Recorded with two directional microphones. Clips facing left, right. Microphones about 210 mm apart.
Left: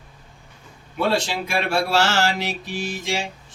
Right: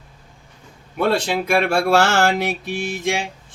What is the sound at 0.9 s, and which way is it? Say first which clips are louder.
Speech: right 3 dB; 55° right (ahead or behind).